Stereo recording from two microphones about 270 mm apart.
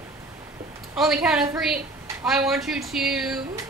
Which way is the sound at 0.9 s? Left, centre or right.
Centre.